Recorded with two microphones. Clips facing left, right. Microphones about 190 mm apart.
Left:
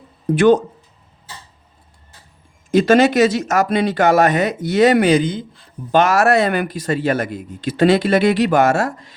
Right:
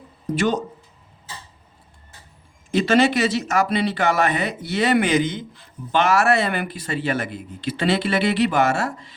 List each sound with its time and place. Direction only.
0.3 s speech: 55° left (ahead or behind)
2.7 s speech: 45° left (ahead or behind)